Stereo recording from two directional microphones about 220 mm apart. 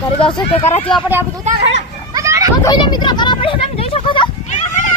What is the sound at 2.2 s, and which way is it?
Children playing, 15° right (ahead or behind).